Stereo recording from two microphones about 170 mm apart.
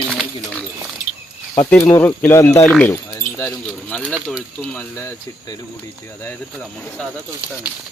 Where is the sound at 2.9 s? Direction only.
20° left (ahead or behind).